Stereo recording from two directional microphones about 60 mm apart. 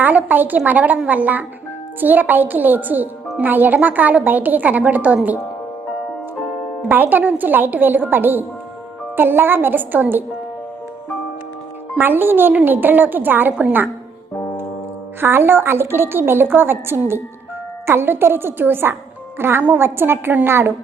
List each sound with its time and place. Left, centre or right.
0.0 s a woman's voice: right
6.8 s a woman's voice: right
11.9 s a woman's voice: right
15.2 s a woman's voice: right